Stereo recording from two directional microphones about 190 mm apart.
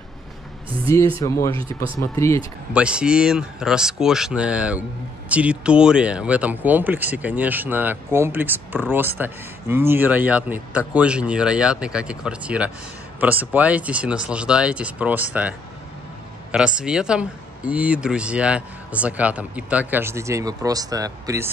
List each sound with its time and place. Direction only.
0.8 s speech: 15° left (ahead or behind)
2.7 s speech: 5° right (ahead or behind)
16.5 s speech: 5° right (ahead or behind)